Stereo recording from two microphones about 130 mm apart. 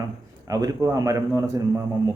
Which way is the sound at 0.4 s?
25° right (ahead or behind).